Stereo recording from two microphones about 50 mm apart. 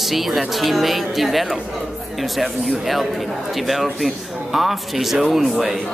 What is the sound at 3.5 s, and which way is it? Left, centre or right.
A woman's voice, centre.